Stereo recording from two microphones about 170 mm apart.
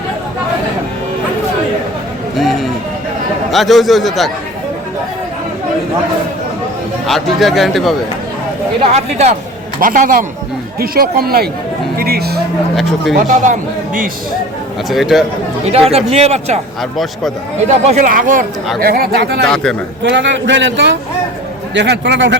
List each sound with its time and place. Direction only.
2.4 s a sound: centre (ahead or behind)
3.5 s speech: centre (ahead or behind)
7.1 s speech: centre (ahead or behind)
8.8 s speech: 40° right (ahead or behind)
9.8 s speech: 50° right (ahead or behind)
10.8 s speech: 65° right (ahead or behind)
12.7 s speech: centre (ahead or behind)
13.2 s speech: 45° right (ahead or behind)
14.8 s speech: centre (ahead or behind)
15.9 s speech: 40° right (ahead or behind)
17.8 s speech: 45° right (ahead or behind)
18.8 s speech: 65° right (ahead or behind)
20.0 s a man's voice: 90° right